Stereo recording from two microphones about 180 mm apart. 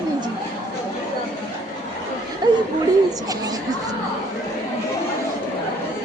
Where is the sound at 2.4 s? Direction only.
20° right (ahead or behind).